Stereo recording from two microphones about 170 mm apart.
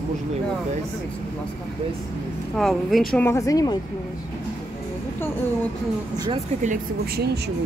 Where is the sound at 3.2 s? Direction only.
20° left (ahead or behind).